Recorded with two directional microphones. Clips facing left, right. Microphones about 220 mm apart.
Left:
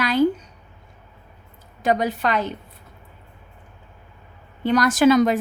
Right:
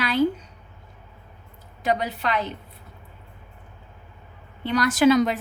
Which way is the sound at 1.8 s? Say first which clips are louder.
Left 4 dB; 45° left (ahead or behind).